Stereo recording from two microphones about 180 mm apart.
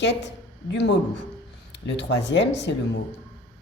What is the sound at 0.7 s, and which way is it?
A woman's voice, 75° left (ahead or behind).